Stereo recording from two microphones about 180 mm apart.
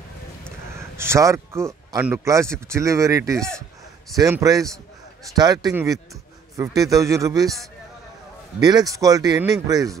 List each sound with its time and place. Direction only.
0.7 s speech: 15° right (ahead or behind)
3.3 s a man's voice: 5° left (ahead or behind)
4.2 s a man's voice: 20° right (ahead or behind)
8.5 s a man's voice: 20° right (ahead or behind)